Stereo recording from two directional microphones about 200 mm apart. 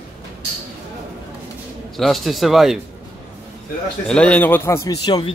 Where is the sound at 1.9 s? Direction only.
Centre (ahead or behind).